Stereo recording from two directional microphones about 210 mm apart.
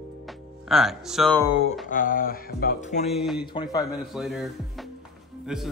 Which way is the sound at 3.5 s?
20° left (ahead or behind).